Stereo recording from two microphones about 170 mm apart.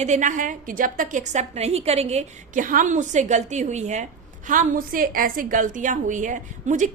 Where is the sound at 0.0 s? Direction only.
45° right (ahead or behind).